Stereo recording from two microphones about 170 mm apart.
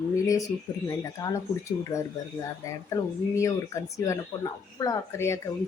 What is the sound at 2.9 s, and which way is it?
A man's voice, 20° left (ahead or behind).